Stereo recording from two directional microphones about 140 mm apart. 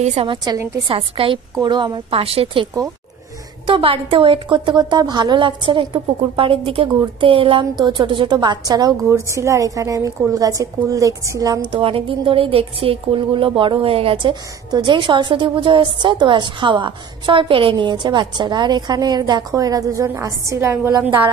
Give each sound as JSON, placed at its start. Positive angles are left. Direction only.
{"t": 0.0, "sound": "a woman's voice", "side_deg": -50}
{"t": 0.8, "sound": "a woman's voice", "side_deg": -40}
{"t": 11.7, "sound": "a woman's voice", "side_deg": -40}